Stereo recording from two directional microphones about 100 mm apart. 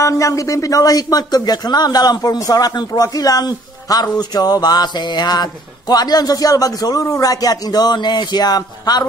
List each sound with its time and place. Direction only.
0.0 s speech: 35° left (ahead or behind)